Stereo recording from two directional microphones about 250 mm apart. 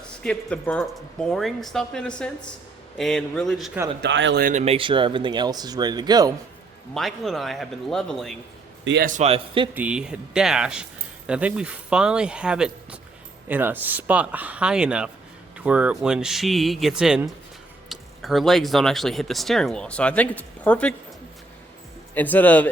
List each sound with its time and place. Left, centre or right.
0.2 s speech: centre
4.0 s speech: right; by 6.3 s centre
6.9 s speech: centre
8.8 s a man's voice: right
9.0 s speech: right
9.7 s speech: centre
22.1 s speech: centre